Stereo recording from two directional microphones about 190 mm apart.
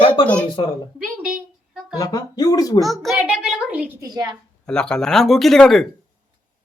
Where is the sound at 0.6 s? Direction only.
25° left (ahead or behind).